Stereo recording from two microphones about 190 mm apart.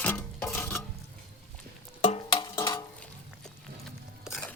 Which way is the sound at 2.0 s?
25° left (ahead or behind).